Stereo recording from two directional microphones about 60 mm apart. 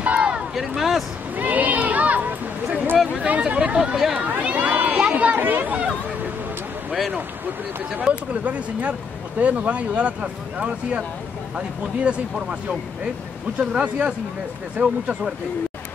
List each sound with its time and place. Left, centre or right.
0.0 s a sound: right
0.6 s speech: centre
1.3 s a sound: right
3.1 s speech: right
4.2 s run: right
5.1 s speech: right
6.9 s speech: centre
8.1 s speech: right